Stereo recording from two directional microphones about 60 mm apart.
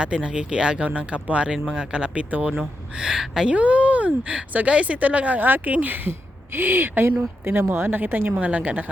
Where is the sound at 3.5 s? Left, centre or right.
Right.